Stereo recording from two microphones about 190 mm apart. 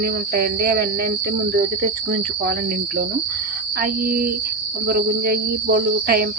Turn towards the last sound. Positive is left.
turn(degrees=-55)  # may be behind; listen again after turning